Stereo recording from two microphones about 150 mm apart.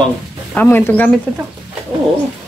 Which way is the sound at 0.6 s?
10° left (ahead or behind).